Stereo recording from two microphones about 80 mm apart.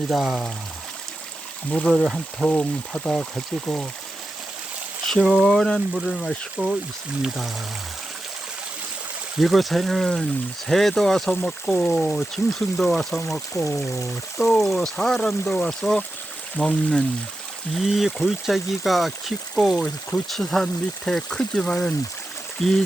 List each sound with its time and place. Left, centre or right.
0.1 s speech: centre
1.9 s speech: centre
5.0 s speech: centre
9.4 s speech: centre